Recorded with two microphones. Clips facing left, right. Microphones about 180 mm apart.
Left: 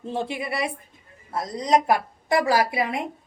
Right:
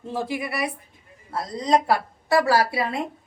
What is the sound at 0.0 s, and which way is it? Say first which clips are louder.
A woman's voice: even; 25° left (ahead or behind).